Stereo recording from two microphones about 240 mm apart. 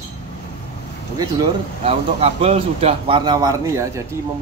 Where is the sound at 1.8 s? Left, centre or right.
Right.